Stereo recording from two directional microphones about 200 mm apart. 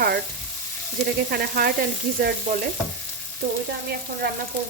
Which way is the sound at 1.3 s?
45° right (ahead or behind).